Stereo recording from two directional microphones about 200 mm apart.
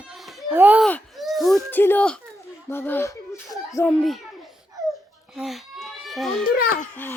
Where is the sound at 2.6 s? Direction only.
10° left (ahead or behind).